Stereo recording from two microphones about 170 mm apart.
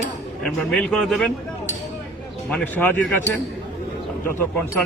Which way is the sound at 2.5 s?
5° left (ahead or behind).